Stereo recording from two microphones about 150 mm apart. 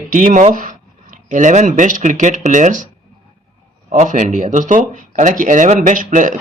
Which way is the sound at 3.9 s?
55° right (ahead or behind).